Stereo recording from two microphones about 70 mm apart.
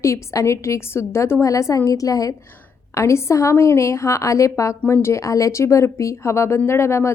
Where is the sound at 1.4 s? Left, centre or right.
Left.